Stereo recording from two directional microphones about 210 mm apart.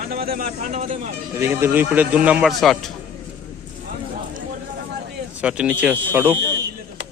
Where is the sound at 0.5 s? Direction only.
35° right (ahead or behind).